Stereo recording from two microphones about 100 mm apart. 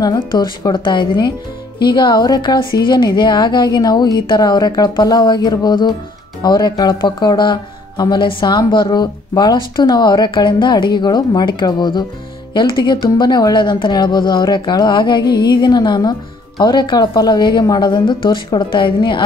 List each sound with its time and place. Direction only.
0.0 s speech: 45° left (ahead or behind)